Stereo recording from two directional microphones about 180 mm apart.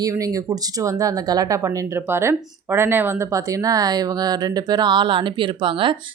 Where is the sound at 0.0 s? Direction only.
20° right (ahead or behind).